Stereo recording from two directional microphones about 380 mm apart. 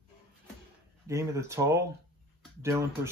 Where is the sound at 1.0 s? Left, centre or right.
Centre.